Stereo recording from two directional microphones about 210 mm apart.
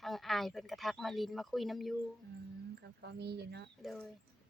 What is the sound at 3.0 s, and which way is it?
Speech, 50° right (ahead or behind).